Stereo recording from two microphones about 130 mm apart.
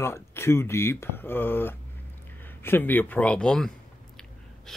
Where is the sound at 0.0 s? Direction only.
20° left (ahead or behind).